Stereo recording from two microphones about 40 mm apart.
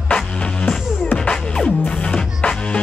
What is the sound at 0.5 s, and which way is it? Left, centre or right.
Music, centre.